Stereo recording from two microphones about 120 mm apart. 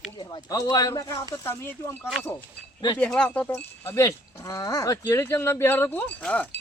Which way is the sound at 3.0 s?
5° left (ahead or behind).